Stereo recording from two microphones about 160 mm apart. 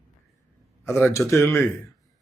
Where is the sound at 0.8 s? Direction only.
15° left (ahead or behind).